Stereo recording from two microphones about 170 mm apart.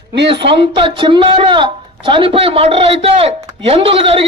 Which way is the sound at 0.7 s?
30° right (ahead or behind).